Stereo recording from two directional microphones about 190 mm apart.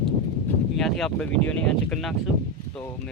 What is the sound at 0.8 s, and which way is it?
Speech, centre (ahead or behind).